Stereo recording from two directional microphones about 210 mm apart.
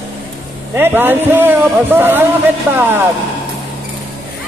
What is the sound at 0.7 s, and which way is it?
Speech, 10° right (ahead or behind).